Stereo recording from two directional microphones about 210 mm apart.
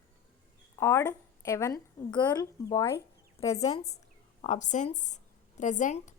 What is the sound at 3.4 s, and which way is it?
A woman's voice, 30° left (ahead or behind).